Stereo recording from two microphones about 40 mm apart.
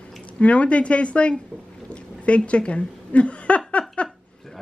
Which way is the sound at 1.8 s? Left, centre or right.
Left.